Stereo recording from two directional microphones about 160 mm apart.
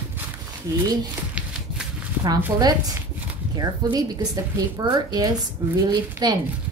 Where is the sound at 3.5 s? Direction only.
25° right (ahead or behind).